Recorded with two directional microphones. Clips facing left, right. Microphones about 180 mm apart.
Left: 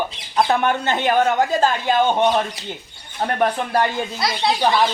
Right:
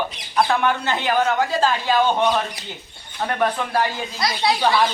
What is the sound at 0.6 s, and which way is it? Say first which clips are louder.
Speech: left 2 dB; 45° left (ahead or behind).